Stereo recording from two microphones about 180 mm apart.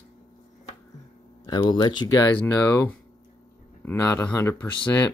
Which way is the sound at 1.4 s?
25° left (ahead or behind).